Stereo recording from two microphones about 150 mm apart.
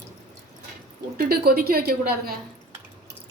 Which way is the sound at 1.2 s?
90° right.